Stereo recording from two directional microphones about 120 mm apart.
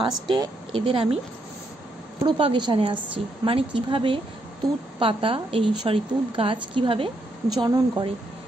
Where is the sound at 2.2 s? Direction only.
45° right (ahead or behind).